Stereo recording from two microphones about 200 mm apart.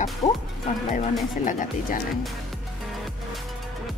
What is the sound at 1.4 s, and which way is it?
Speech, 40° left (ahead or behind).